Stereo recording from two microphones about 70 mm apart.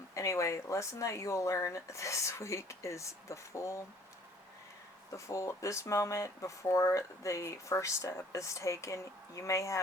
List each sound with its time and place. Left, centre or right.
0.1 s speech: left
5.1 s speech: left